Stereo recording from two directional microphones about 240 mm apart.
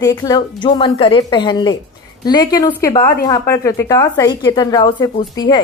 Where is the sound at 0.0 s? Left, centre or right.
Centre.